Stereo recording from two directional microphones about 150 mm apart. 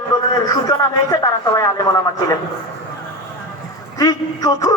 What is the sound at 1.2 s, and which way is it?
Speech, 25° left (ahead or behind).